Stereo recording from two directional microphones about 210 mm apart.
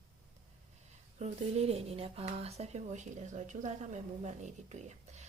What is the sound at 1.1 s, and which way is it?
Speech, 30° right (ahead or behind).